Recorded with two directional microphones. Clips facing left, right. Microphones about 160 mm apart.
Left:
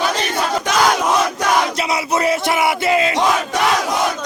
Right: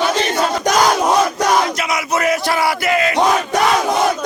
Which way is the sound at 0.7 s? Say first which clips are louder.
Right 5 dB; 40° right (ahead or behind).